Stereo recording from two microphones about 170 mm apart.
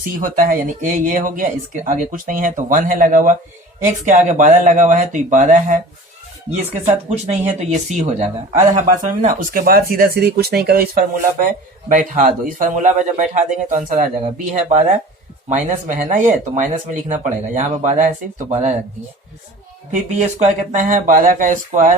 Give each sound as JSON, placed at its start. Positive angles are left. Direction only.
{"t": 0.2, "sound": "speech", "side_deg": -55}
{"t": 7.1, "sound": "speech", "side_deg": -40}
{"t": 20.1, "sound": "speech", "side_deg": -40}